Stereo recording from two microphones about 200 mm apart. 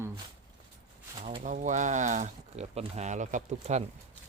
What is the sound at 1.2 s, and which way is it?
Speech, 35° right (ahead or behind).